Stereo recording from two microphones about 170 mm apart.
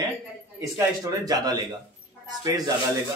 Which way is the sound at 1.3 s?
20° right (ahead or behind).